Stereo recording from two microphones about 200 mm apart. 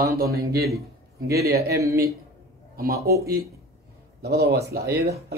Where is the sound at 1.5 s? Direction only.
15° right (ahead or behind).